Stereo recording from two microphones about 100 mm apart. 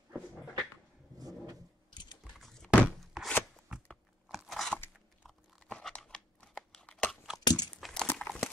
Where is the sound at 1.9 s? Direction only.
50° left (ahead or behind).